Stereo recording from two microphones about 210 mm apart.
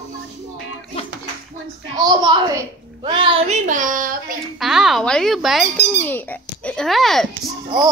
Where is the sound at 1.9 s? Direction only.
20° right (ahead or behind); by 4.3 s 40° right (ahead or behind).